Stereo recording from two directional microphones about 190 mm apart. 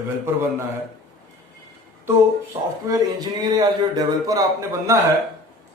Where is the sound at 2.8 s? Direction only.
20° right (ahead or behind).